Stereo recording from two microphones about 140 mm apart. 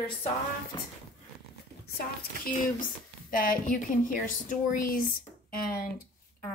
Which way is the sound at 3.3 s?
80° left.